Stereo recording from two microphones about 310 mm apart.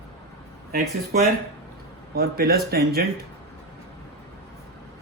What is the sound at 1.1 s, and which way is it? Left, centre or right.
Speech, right.